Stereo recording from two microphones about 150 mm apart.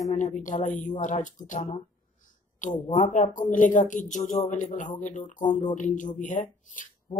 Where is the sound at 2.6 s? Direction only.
30° left (ahead or behind).